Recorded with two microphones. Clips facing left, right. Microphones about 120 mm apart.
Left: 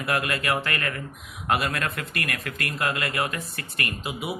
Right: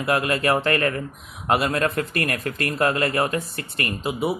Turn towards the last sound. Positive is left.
turn(degrees=-30)  # may be behind; listen again after turning